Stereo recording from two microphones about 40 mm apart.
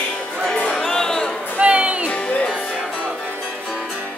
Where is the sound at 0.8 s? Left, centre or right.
Centre.